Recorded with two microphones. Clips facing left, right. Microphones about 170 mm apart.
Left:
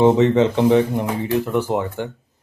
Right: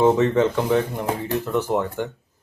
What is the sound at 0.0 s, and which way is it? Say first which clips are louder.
Speech: left 3 dB; 20° left (ahead or behind).